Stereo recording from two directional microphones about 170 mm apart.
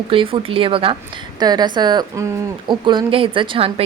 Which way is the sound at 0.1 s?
30° right (ahead or behind).